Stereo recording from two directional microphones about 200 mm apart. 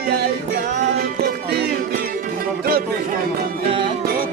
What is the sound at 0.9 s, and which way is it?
Music, 50° right (ahead or behind).